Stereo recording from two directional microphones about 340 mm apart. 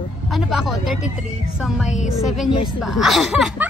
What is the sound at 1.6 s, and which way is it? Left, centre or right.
Speech, centre.